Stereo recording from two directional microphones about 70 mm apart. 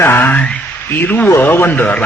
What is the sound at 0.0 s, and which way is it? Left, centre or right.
Speech, left.